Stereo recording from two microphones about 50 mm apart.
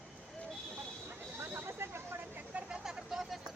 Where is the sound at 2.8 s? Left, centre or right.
Centre.